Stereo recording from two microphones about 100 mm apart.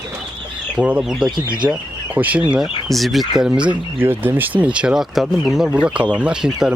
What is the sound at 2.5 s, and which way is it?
Speech, 5° right (ahead or behind).